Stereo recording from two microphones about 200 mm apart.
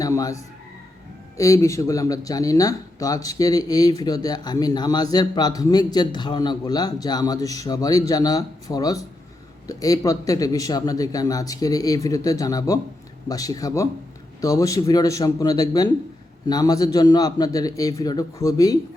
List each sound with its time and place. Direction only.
0.0 s a man's voice: 15° left (ahead or behind)